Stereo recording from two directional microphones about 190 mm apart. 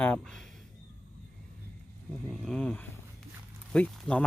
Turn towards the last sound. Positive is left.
turn(degrees=5)  # may be behind; listen again after turning